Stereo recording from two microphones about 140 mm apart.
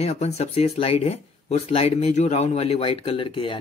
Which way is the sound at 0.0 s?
50° left (ahead or behind).